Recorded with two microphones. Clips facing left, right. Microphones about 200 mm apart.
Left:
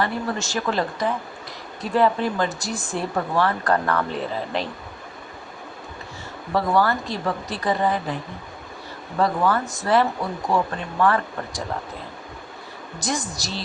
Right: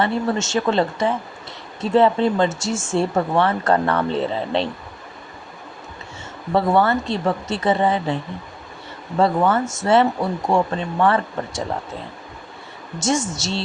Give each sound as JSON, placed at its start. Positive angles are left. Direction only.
{"t": 0.0, "sound": "speech", "side_deg": -25}
{"t": 6.5, "sound": "speech", "side_deg": -25}
{"t": 13.0, "sound": "speech", "side_deg": -25}